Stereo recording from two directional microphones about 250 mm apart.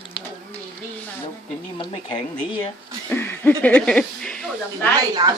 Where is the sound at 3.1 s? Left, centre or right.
Centre.